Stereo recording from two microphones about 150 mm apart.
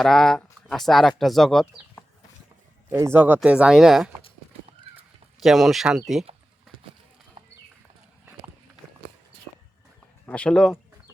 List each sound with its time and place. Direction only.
0.0 s speech: 5° left (ahead or behind)
2.9 s speech: 15° right (ahead or behind)
5.4 s speech: centre (ahead or behind)
10.2 s speech: 10° left (ahead or behind)